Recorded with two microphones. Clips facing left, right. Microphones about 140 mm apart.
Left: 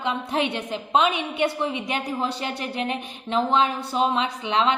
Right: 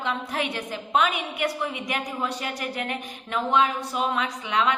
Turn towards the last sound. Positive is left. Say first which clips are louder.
# left 2 dB
turn(degrees=25)  # may be behind; listen again after turning